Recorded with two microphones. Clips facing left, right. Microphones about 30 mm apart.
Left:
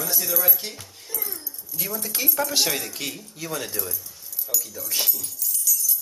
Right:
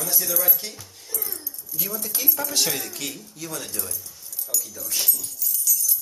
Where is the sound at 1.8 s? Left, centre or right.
Centre.